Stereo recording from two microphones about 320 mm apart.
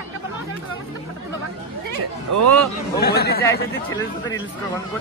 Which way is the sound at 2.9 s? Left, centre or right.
Left.